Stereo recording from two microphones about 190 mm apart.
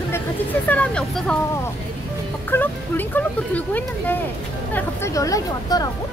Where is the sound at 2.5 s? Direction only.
10° left (ahead or behind).